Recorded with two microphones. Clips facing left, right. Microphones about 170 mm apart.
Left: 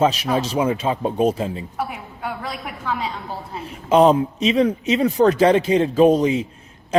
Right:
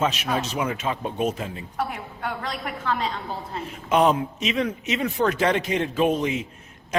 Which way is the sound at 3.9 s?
30° left (ahead or behind).